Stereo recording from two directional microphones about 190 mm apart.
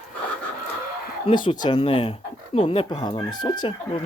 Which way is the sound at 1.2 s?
25° left (ahead or behind).